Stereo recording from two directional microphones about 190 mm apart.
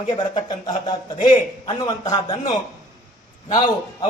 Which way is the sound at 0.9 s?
20° left (ahead or behind).